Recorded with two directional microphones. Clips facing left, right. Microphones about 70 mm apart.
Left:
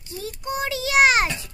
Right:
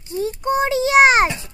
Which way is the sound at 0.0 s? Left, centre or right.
Right.